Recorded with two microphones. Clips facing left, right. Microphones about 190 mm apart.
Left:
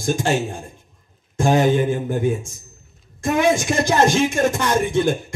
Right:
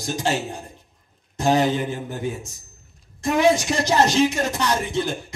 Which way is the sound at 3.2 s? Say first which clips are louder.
Even; 50° left (ahead or behind).